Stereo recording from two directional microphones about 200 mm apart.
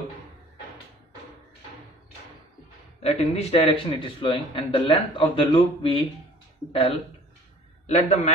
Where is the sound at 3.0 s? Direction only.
30° left (ahead or behind).